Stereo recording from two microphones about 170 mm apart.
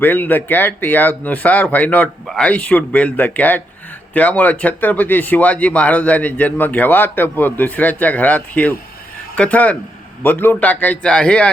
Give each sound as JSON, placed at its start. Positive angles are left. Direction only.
{"t": 0.0, "sound": "speech", "side_deg": 10}